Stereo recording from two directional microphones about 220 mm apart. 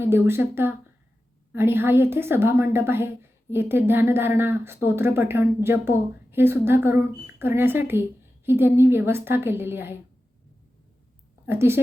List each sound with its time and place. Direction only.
0.0 s a woman's voice: 10° right (ahead or behind)
11.4 s a woman's voice: 10° right (ahead or behind)